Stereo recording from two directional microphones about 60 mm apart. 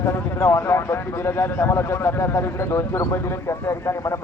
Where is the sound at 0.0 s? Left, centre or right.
Left.